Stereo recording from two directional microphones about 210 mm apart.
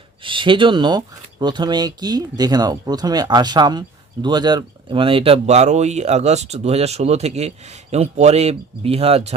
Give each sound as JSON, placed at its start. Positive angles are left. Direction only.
{"t": 0.2, "sound": "speech", "side_deg": -25}